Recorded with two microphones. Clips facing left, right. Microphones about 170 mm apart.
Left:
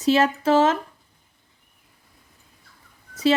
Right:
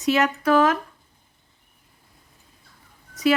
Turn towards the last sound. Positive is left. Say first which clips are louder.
# even
turn(degrees=30)  # may be behind; listen again after turning